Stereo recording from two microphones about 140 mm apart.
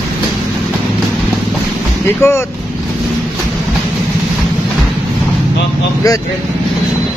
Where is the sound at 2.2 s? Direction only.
20° left (ahead or behind).